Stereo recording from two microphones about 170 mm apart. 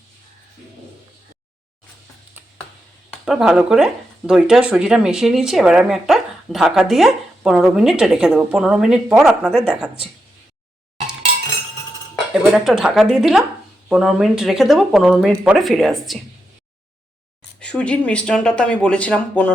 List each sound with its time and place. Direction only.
3.2 s speech: 5° right (ahead or behind)
12.3 s speech: centre (ahead or behind)
17.6 s speech: 5° left (ahead or behind)